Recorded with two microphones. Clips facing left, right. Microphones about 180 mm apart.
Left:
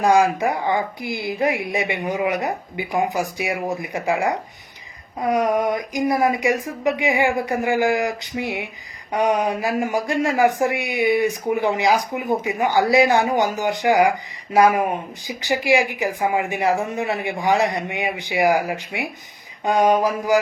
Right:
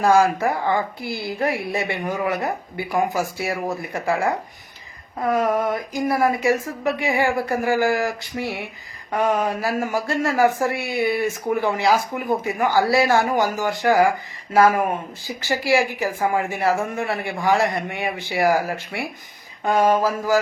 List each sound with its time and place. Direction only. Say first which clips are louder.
0.0 s speech: even; 15° left (ahead or behind)